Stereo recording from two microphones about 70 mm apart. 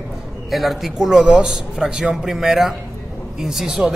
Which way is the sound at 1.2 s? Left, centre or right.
Centre.